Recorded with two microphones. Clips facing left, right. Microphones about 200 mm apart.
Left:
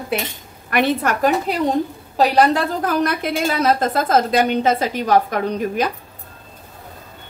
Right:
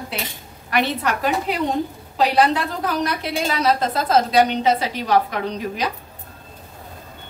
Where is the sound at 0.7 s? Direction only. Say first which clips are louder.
Left 3 dB; 50° left (ahead or behind).